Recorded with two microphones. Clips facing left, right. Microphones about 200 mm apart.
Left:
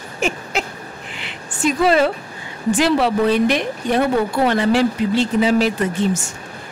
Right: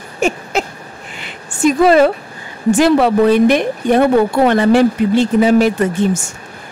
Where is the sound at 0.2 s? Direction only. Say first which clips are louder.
Right 5 dB; 40° right (ahead or behind).